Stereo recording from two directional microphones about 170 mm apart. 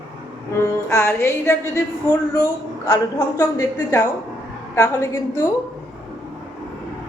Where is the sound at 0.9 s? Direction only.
15° left (ahead or behind).